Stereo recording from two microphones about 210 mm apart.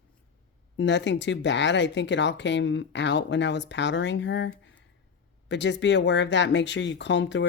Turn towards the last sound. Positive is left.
turn(degrees=60)  # may be behind; listen again after turning